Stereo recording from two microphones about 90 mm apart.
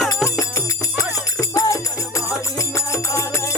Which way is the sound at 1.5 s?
40° left (ahead or behind).